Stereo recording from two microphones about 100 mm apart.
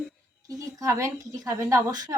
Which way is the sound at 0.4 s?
35° right (ahead or behind).